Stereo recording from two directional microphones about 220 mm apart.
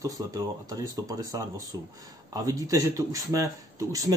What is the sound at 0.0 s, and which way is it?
Speech, 15° right (ahead or behind).